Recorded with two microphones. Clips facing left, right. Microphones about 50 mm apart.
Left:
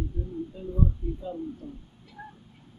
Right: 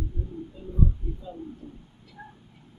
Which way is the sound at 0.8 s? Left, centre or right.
Left.